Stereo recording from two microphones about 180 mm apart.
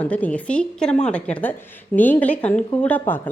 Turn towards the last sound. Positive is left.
turn(degrees=10)  # may be behind; listen again after turning